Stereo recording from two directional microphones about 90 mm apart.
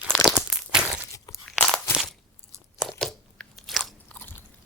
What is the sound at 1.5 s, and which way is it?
Crunch, 5° left (ahead or behind).